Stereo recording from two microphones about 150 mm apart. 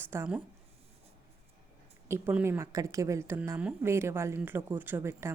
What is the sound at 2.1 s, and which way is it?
A woman's voice, 15° right (ahead or behind).